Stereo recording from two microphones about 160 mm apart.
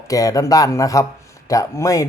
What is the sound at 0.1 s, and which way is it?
Speech, 20° left (ahead or behind).